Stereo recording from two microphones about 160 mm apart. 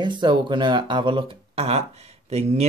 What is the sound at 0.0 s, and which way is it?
Speech, 30° right (ahead or behind).